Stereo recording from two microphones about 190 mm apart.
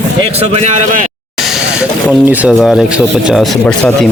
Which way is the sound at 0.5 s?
40° right (ahead or behind).